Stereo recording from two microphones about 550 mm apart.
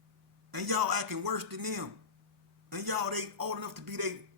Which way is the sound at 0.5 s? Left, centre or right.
Right.